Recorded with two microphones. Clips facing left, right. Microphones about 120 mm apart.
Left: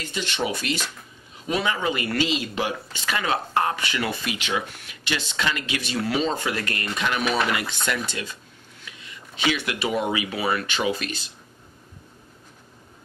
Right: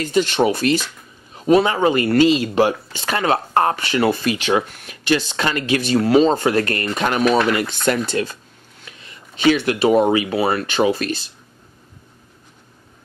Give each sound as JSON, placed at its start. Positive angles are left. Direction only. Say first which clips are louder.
{"t": 0.0, "sound": "speech", "louder": "right 11 dB", "side_deg": -45}
{"t": 8.8, "sound": "a sound", "louder": "right 1 dB", "side_deg": -40}
{"t": 9.5, "sound": "speech", "louder": "right 11 dB", "side_deg": -45}